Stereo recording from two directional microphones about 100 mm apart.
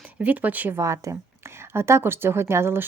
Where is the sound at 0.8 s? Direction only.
30° right (ahead or behind).